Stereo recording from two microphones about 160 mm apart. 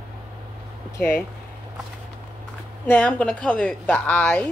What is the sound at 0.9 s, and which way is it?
Speech, 15° left (ahead or behind).